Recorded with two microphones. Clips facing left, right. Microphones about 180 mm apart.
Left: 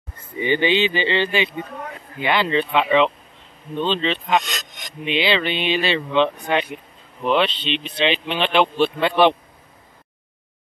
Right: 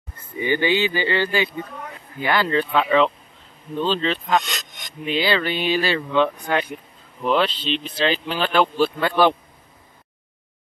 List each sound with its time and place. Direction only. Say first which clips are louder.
0.4 s speech: left 1 dB; 20° left (ahead or behind)